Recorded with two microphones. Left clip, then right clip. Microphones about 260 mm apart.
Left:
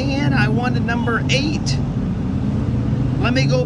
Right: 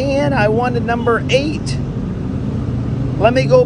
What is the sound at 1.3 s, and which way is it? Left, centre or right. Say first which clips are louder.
Speech: right 5 dB; left.